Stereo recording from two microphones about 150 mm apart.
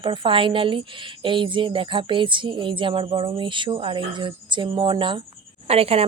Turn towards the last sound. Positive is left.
turn(degrees=-40)  # may be behind; listen again after turning